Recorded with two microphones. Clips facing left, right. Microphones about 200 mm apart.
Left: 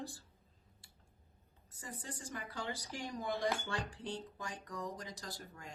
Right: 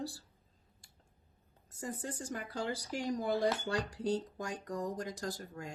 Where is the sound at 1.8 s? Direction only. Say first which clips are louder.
Right 7 dB; 45° right (ahead or behind).